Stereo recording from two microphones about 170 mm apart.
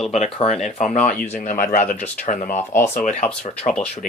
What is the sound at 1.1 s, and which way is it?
Speech, 10° left (ahead or behind).